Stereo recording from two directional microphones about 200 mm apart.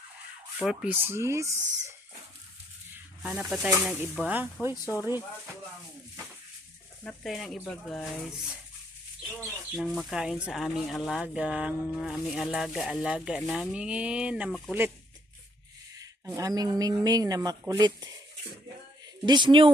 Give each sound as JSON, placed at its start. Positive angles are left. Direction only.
{"t": 0.6, "sound": "speech", "side_deg": -5}
{"t": 2.9, "sound": "speech", "side_deg": -5}
{"t": 4.7, "sound": "speech", "side_deg": 15}
{"t": 7.0, "sound": "speech", "side_deg": 5}
{"t": 9.7, "sound": "speech", "side_deg": 0}
{"t": 16.0, "sound": "speech", "side_deg": -15}
{"t": 19.2, "sound": "speech", "side_deg": -25}